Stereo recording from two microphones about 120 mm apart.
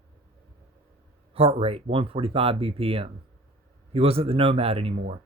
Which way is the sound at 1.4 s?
55° right (ahead or behind).